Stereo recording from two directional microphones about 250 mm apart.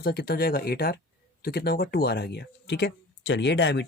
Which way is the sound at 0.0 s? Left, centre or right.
Left.